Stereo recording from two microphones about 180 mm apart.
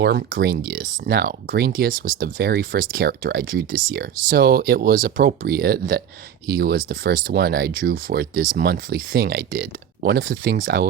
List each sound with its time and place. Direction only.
0.0 s speech: 60° right (ahead or behind)